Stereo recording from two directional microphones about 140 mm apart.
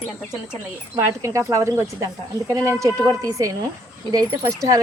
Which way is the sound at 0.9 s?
20° right (ahead or behind).